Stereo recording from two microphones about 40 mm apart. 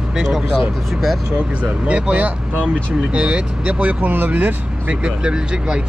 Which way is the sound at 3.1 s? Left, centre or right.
Right.